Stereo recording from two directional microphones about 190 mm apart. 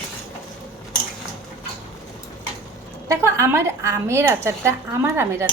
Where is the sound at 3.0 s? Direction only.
15° right (ahead or behind).